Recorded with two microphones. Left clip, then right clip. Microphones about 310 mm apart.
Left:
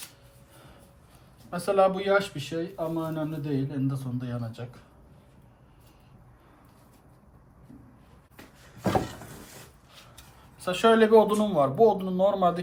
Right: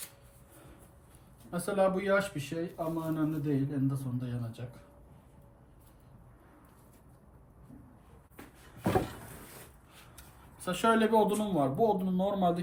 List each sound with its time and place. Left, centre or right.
1.5 s speech: centre
1.9 s speech: centre
10.7 s speech: left